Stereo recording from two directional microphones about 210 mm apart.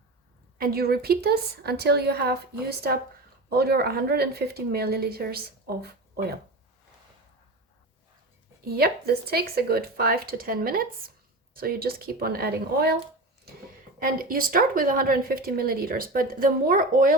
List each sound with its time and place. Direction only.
0.6 s speech: 45° right (ahead or behind)
8.6 s speech: 45° right (ahead or behind)
14.0 s speech: 40° right (ahead or behind)